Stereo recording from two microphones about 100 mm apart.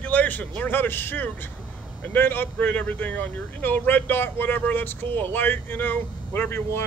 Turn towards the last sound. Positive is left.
turn(degrees=25)  # may be behind; listen again after turning